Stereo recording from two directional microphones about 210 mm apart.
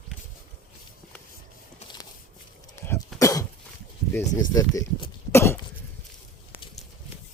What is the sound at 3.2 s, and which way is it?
Cough, 15° left (ahead or behind).